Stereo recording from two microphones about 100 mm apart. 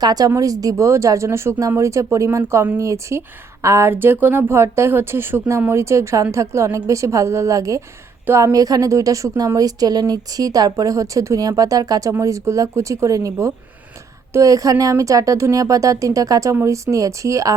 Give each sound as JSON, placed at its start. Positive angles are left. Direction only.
{"t": 0.0, "sound": "speech", "side_deg": -40}
{"t": 8.5, "sound": "speech", "side_deg": -35}